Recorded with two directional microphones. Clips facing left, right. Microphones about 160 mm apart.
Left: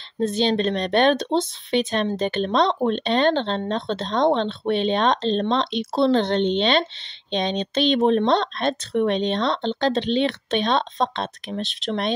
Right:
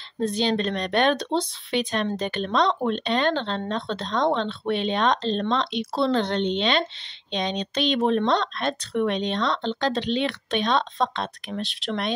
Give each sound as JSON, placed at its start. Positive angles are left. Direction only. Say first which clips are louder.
{"t": 0.2, "sound": "speech", "louder": "left 3 dB", "side_deg": 25}